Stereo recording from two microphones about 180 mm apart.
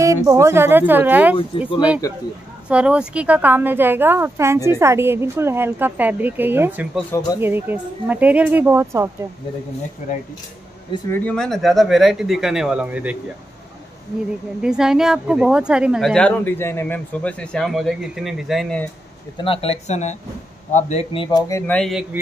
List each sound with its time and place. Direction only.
0.0 s speech: 15° right (ahead or behind)
1.5 s speech: 30° left (ahead or behind)
2.7 s speech: 5° right (ahead or behind)
10.0 s speech: 45° left (ahead or behind)
11.1 s a woman's voice: 10° left (ahead or behind); by 13.2 s 10° right (ahead or behind)
14.6 s a woman's voice: 5° right (ahead or behind)
19.4 s speech: 30° left (ahead or behind); by 21.7 s 15° left (ahead or behind)
21.7 s a woman's voice: centre (ahead or behind)